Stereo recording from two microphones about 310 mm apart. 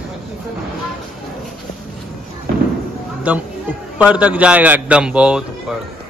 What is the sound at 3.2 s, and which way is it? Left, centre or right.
A man's voice, centre.